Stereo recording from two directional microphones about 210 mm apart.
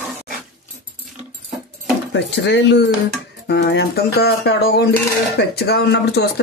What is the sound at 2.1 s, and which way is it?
Speech, 55° left (ahead or behind).